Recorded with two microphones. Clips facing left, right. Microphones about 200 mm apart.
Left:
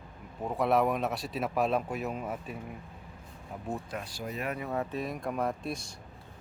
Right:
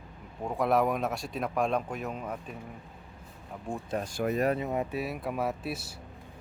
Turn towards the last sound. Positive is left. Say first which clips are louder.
# even
turn(degrees=-5)  # may be behind; listen again after turning